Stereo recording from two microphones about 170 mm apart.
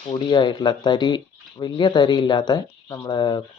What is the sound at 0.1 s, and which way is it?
Speech, 25° left (ahead or behind).